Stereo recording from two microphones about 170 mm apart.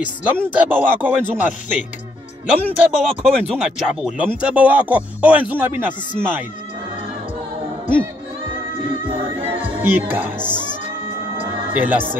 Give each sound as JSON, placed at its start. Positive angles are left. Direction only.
{"t": 0.0, "sound": "speech", "side_deg": -10}
{"t": 9.0, "sound": "music", "side_deg": -30}
{"t": 9.8, "sound": "speech", "side_deg": -10}
{"t": 11.7, "sound": "speech", "side_deg": -10}